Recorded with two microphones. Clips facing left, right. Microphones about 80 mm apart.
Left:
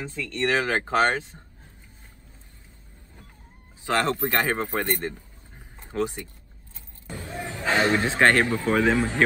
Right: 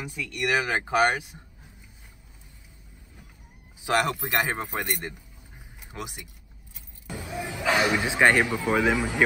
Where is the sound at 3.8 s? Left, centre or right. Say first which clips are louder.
Left 1 dB; centre.